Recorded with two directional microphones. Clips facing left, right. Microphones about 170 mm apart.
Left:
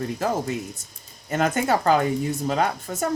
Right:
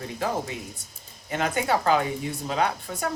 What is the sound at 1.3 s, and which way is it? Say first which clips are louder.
Speech: left 3 dB; 45° left (ahead or behind).